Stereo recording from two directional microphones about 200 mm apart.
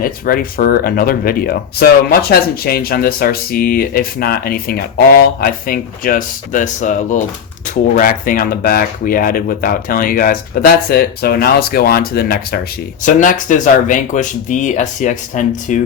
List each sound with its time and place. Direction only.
0.0 s speech: 45° left (ahead or behind)
13.1 s speech: 40° left (ahead or behind)